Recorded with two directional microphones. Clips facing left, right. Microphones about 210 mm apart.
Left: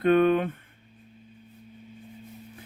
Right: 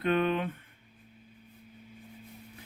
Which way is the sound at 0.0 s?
50° left (ahead or behind).